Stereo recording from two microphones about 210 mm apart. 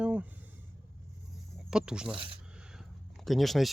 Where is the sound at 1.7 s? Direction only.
5° right (ahead or behind).